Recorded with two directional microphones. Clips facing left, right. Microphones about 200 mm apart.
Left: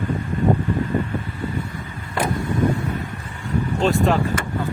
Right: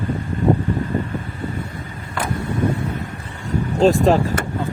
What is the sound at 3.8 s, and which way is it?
Speech, 35° right (ahead or behind).